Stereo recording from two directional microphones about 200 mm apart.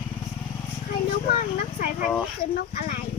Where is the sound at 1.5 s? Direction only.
45° left (ahead or behind).